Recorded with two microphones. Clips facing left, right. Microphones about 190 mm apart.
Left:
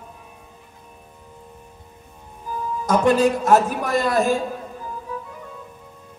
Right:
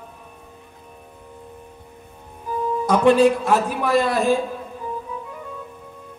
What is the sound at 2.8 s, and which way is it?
A man's voice, 45° left (ahead or behind).